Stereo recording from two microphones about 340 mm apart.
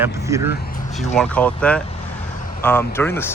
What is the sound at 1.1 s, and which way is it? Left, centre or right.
Speech, centre.